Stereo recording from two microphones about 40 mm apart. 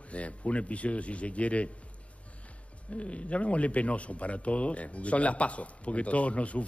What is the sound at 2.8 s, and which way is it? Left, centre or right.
Speech, left.